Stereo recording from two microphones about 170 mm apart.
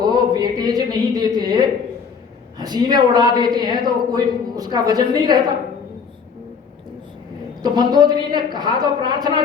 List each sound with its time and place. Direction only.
0.0 s a sound: 25° right (ahead or behind)
2.6 s a woman's voice: 25° right (ahead or behind)
7.6 s a woman's voice: 25° right (ahead or behind)